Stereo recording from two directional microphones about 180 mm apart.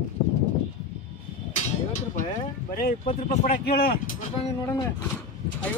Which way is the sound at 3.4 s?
55° left (ahead or behind).